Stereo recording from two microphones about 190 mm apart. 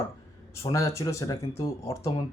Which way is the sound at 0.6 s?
15° left (ahead or behind).